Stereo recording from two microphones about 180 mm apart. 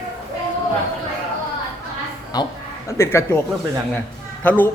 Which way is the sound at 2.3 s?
20° left (ahead or behind).